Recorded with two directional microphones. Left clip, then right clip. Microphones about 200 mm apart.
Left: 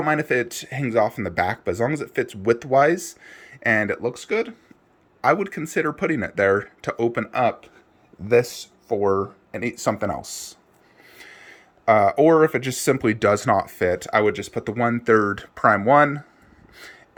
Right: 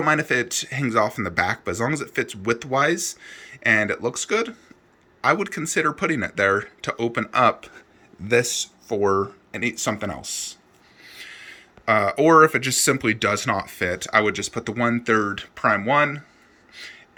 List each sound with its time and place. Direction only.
0.0 s speech: 15° left (ahead or behind)
8.4 s speech: 50° left (ahead or behind)
8.9 s speech: 10° left (ahead or behind); by 16.2 s 30° left (ahead or behind)
16.7 s a sound: 30° left (ahead or behind)